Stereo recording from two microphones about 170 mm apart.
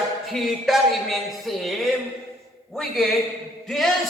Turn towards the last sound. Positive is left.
turn(degrees=0)  # may be behind; listen again after turning